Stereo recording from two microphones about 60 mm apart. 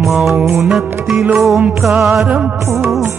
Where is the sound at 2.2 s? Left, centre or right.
Centre.